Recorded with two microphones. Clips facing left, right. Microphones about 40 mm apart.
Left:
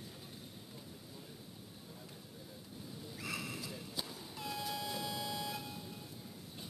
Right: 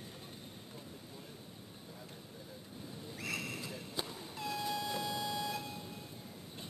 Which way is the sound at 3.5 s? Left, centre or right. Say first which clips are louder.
Right 2 dB; centre.